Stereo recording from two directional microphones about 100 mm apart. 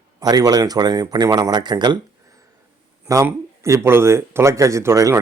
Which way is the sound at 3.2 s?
30° right (ahead or behind).